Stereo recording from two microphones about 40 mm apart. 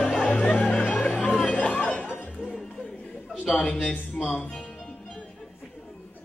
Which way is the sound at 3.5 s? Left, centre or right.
Left.